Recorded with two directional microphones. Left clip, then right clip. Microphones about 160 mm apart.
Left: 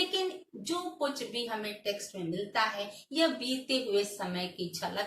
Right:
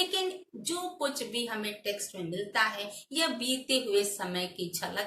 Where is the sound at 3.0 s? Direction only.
15° right (ahead or behind).